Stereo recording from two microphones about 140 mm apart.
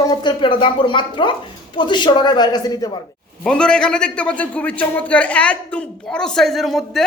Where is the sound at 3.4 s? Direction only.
5° left (ahead or behind).